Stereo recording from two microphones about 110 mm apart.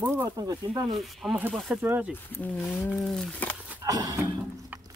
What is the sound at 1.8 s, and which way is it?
Speech, 15° right (ahead or behind).